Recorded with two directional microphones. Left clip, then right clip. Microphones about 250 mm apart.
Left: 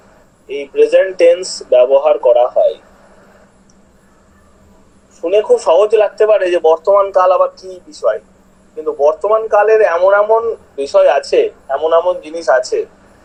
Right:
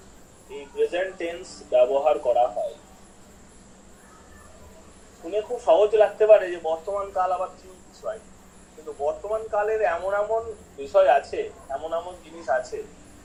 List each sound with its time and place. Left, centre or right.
0.4 s a man's voice: left
5.2 s a man's voice: left